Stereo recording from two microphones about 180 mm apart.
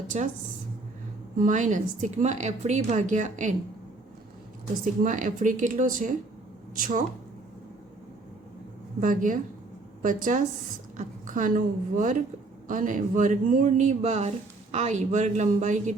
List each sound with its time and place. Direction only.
0.1 s a woman's voice: 40° right (ahead or behind)
1.4 s speech: 45° right (ahead or behind)
5.0 s speech: 45° right (ahead or behind)
9.0 s speech: 45° right (ahead or behind)